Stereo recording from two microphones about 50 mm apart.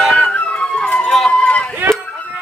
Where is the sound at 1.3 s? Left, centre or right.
Left.